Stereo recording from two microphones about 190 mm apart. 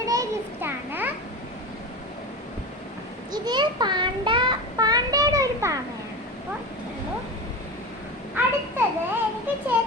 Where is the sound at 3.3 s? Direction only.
20° right (ahead or behind).